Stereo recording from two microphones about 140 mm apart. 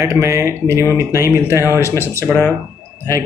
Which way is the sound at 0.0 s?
20° right (ahead or behind).